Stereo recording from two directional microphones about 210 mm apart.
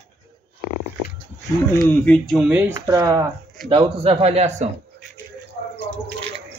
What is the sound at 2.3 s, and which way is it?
A man's voice, 5° right (ahead or behind).